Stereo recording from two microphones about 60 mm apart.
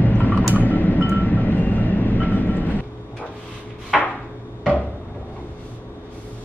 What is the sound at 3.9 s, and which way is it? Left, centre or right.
Chopping, centre.